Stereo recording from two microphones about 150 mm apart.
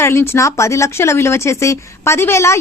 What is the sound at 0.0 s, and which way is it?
Speech, 15° left (ahead or behind).